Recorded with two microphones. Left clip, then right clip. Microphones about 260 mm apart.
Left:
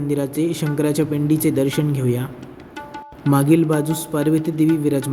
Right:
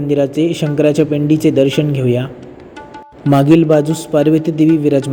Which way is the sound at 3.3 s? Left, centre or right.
Centre.